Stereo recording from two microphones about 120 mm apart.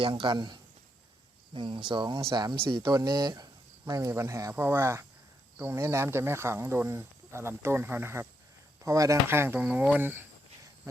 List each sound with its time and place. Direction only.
0.0 s speech: 40° right (ahead or behind); by 10.2 s 15° right (ahead or behind)